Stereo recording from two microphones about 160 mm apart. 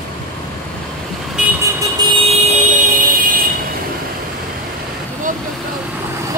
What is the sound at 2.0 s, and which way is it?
Vehicle, 30° right (ahead or behind).